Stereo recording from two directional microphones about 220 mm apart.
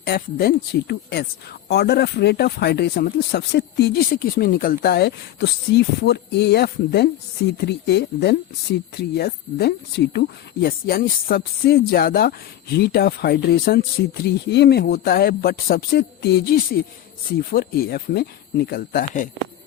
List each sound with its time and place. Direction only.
0.0 s speech: 45° left (ahead or behind)